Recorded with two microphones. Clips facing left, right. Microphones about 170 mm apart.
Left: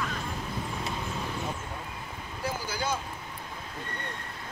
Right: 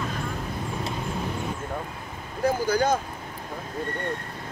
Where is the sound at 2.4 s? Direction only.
50° right (ahead or behind).